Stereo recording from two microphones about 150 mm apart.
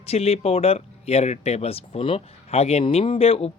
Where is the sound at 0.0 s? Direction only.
40° left (ahead or behind).